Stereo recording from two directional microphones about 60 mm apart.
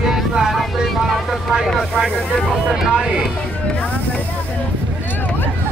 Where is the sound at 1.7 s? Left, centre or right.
Centre.